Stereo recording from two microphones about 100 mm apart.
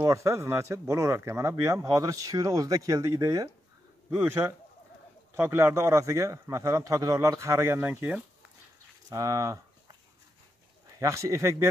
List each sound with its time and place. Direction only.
0.0 s speech: 30° right (ahead or behind)
4.1 s a man's voice: 25° right (ahead or behind)
9.1 s speech: 35° right (ahead or behind)
11.0 s speech: 30° right (ahead or behind)